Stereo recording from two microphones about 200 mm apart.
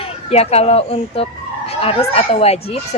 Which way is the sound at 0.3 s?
30° left (ahead or behind).